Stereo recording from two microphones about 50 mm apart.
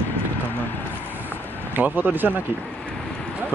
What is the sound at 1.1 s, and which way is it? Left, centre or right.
Vehicle, right.